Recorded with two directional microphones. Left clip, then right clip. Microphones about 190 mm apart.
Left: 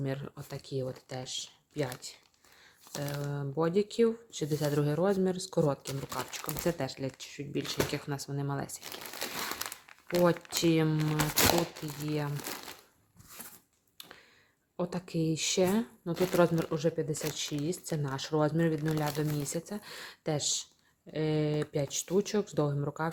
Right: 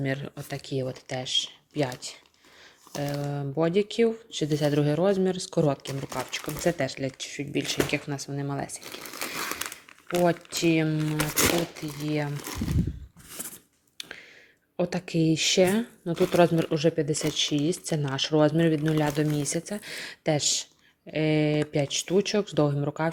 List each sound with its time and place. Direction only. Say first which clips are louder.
0.0 s speech: right 6 dB; centre (ahead or behind)
10.1 s speech: right 3 dB; 15° left (ahead or behind)
11.9 s speech: right 5 dB; 5° left (ahead or behind)
14.0 s a sound: right 10 dB; 5° right (ahead or behind)
14.8 s speech: right 7 dB; 5° right (ahead or behind)